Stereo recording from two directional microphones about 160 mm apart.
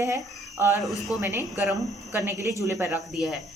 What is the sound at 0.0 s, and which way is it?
Speech, 20° right (ahead or behind).